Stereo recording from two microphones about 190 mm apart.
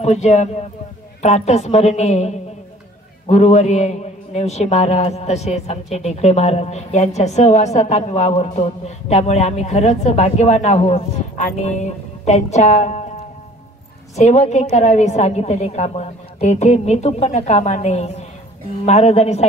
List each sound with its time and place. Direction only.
0.0 s a man's voice: 35° left (ahead or behind)
14.1 s a man's voice: 35° left (ahead or behind)